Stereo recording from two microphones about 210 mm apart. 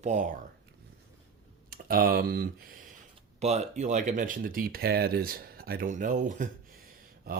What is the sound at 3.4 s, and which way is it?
Speech, 30° right (ahead or behind).